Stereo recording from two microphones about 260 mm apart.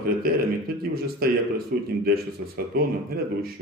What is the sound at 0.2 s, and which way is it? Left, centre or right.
A man's voice, right.